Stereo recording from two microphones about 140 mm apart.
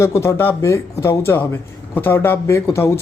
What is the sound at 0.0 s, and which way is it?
A man's voice, 20° left (ahead or behind).